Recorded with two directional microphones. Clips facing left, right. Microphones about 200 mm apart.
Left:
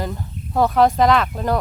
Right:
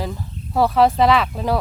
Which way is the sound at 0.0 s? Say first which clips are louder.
Left 1 dB; centre (ahead or behind).